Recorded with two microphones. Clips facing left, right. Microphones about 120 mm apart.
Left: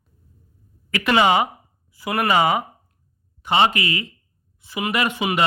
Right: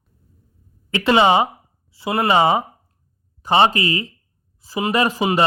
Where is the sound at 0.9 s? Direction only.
25° right (ahead or behind).